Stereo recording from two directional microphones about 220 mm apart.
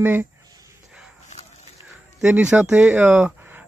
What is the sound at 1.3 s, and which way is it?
Walk, 30° left (ahead or behind).